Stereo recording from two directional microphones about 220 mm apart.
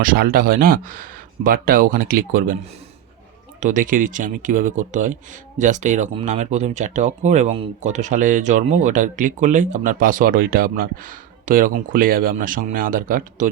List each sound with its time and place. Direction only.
0.0 s speech: 40° right (ahead or behind)
3.6 s speech: 35° right (ahead or behind)